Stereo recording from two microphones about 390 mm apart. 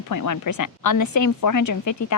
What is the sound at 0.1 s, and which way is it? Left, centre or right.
Speech, left.